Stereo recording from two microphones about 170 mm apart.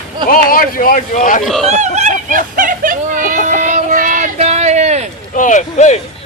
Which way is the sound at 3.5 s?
50° right (ahead or behind).